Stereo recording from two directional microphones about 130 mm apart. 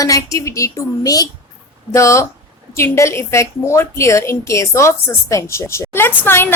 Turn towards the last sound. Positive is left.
turn(degrees=15)  # may be behind; listen again after turning